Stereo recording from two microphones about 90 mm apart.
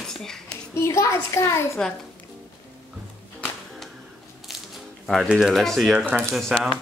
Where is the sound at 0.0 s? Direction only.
5° left (ahead or behind).